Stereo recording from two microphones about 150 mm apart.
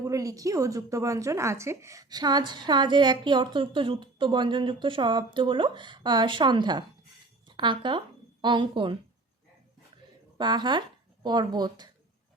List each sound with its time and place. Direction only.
0.0 s speech: 20° right (ahead or behind)
10.3 s speech: 30° right (ahead or behind)